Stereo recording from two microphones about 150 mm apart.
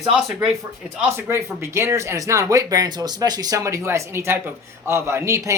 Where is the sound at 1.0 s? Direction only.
15° right (ahead or behind).